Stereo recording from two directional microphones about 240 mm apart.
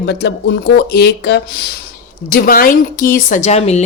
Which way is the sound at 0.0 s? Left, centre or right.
Left.